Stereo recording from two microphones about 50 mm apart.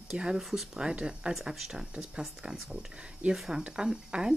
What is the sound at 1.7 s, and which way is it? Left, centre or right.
Speech, centre.